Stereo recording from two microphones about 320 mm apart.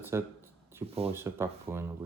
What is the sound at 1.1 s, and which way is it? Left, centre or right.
Speech, centre.